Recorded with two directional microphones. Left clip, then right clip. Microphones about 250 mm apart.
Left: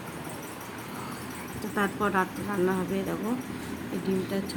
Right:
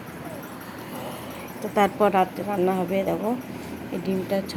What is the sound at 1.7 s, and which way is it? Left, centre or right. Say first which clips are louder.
Speech: right 7 dB; centre.